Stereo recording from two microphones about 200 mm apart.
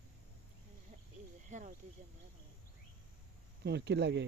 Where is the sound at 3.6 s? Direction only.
55° right (ahead or behind).